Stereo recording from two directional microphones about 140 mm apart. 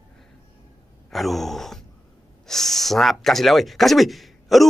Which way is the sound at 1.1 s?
Centre (ahead or behind).